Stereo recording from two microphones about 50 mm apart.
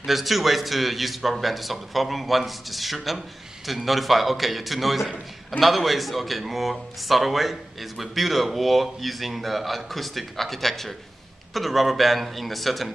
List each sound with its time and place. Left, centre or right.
0.0 s speech: centre